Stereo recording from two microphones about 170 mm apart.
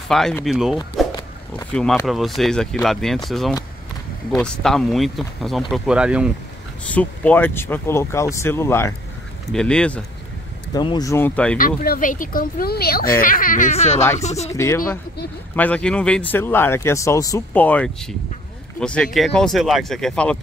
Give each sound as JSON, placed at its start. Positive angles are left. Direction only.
{"t": 0.1, "sound": "speech", "side_deg": 0}
{"t": 1.0, "sound": "a sound", "side_deg": 0}
{"t": 1.7, "sound": "speech", "side_deg": 5}
{"t": 6.9, "sound": "speech", "side_deg": 10}
{"t": 9.5, "sound": "speech", "side_deg": 5}
{"t": 10.7, "sound": "speech", "side_deg": 25}
{"t": 11.5, "sound": "speech", "side_deg": 60}
{"t": 14.5, "sound": "speech", "side_deg": 15}
{"t": 17.6, "sound": "speech", "side_deg": 10}